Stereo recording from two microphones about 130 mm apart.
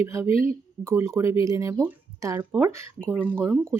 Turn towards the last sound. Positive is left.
turn(degrees=-15)  # may be behind; listen again after turning